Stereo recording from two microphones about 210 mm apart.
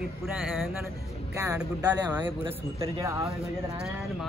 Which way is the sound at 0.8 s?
15° right (ahead or behind).